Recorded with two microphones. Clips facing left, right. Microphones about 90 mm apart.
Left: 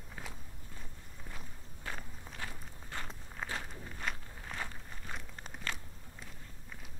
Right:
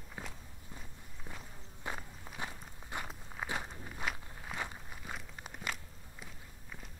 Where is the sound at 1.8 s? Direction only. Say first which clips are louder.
Right 2 dB; 15° right (ahead or behind).